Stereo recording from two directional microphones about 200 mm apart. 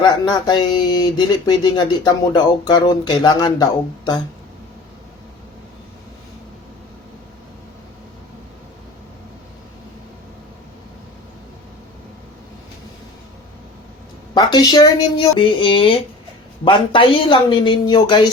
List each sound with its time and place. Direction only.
0.0 s speech: 20° left (ahead or behind)
14.3 s speech: 20° left (ahead or behind)